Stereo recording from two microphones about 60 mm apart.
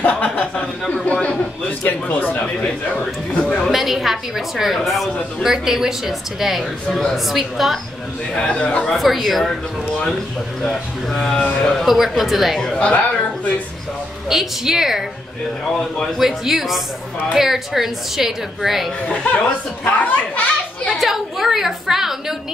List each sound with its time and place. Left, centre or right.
0.0 s a sound: left
1.8 s a man's voice: left
3.7 s a woman's voice: centre
6.9 s a man's voice: centre
7.2 s a woman's voice: centre
8.4 s a man's voice: centre
8.9 s a woman's voice: centre
10.6 s a woman's voice: centre
12.5 s a man's voice: centre
14.3 s a woman's voice: centre
16.2 s a woman's voice: centre
19.0 s speech: left
21.0 s a sound: centre